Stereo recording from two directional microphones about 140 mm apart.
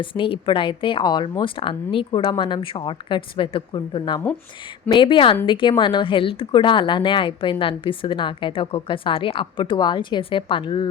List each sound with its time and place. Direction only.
0.0 s speech: 40° left (ahead or behind)